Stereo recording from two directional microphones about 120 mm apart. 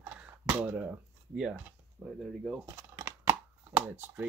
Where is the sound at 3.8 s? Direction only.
15° right (ahead or behind).